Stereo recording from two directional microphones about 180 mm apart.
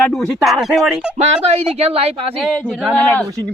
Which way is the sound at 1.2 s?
35° right (ahead or behind).